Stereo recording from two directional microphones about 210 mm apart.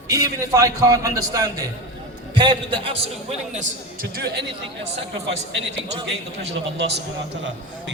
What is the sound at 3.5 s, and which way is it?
Speech, 45° right (ahead or behind).